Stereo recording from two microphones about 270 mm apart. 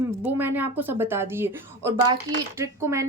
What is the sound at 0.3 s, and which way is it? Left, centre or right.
A woman's voice, centre.